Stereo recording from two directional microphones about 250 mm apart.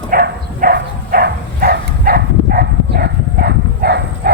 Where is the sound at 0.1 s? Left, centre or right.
Right.